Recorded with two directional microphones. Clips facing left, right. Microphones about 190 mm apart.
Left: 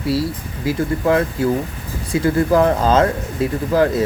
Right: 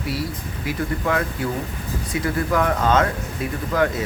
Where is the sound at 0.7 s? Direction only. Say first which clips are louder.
Left 6 dB; 30° left (ahead or behind).